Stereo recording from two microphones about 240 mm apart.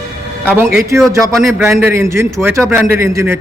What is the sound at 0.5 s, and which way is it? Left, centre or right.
Speech, centre.